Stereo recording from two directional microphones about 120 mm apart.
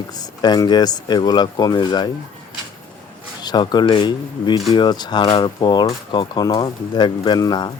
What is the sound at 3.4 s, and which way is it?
Speech, 35° left (ahead or behind).